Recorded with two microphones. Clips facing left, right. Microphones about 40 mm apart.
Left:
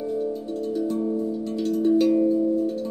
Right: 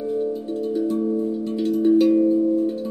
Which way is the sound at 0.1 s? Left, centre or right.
Centre.